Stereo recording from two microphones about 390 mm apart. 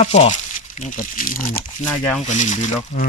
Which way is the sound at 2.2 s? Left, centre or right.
Centre.